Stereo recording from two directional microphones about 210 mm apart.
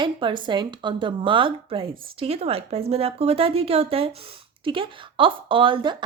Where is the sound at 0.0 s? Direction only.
25° right (ahead or behind).